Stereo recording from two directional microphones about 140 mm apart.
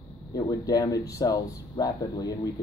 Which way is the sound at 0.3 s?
25° left (ahead or behind).